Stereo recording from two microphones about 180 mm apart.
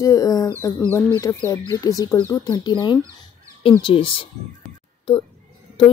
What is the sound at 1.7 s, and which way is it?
Speech, 20° left (ahead or behind).